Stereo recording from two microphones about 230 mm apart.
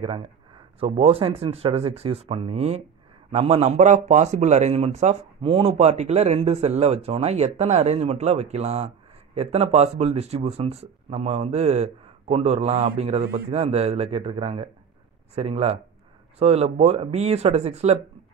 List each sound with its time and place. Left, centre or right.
0.7 s speech: right